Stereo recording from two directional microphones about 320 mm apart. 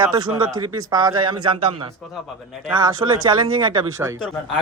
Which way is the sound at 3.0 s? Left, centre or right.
Centre.